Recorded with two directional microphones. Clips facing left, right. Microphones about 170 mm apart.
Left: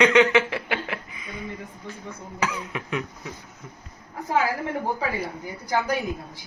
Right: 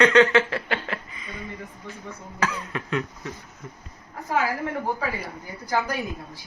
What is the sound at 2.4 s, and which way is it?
Speech, 10° left (ahead or behind).